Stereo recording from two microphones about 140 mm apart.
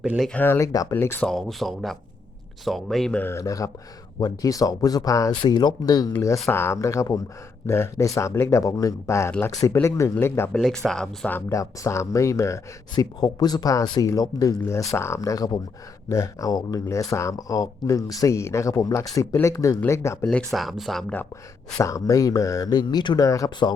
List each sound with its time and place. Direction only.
0.0 s speech: 5° right (ahead or behind)
0.3 s speech: 15° left (ahead or behind)
1.3 s speech: centre (ahead or behind); by 10.5 s 15° left (ahead or behind)
10.5 s speech: 5° left (ahead or behind)
11.3 s speech: 20° left (ahead or behind)
20.2 s speech: centre (ahead or behind)
21.8 s speech: 25° left (ahead or behind)